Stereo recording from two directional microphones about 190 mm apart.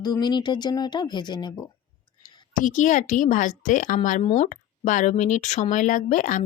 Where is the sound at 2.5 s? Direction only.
45° left (ahead or behind).